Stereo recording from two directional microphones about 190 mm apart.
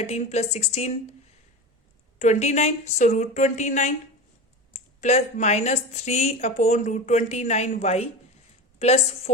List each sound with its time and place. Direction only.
0.0 s a woman's voice: 35° left (ahead or behind)
2.1 s a woman's voice: 40° left (ahead or behind)